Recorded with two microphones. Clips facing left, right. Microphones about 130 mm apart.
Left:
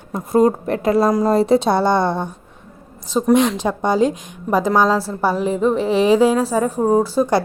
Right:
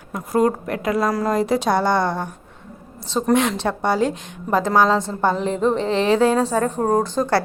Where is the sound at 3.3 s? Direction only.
15° left (ahead or behind).